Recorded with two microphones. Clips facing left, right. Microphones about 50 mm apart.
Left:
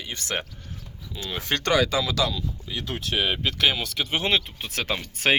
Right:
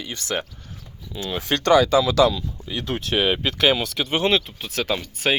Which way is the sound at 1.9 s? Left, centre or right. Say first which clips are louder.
Right 8 dB; right.